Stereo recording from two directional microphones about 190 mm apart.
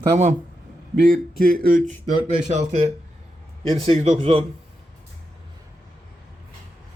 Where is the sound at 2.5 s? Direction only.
35° right (ahead or behind).